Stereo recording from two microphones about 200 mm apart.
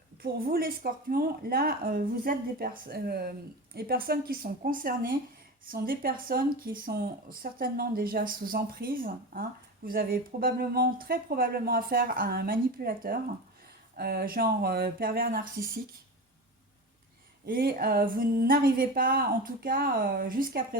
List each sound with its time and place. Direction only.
0.2 s speech: 50° right (ahead or behind)
17.4 s speech: 50° right (ahead or behind)